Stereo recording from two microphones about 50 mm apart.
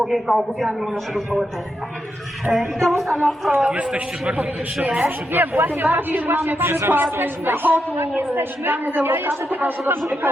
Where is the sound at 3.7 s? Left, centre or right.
Right.